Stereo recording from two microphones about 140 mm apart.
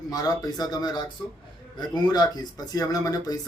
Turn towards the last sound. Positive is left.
turn(degrees=25)  # may be behind; listen again after turning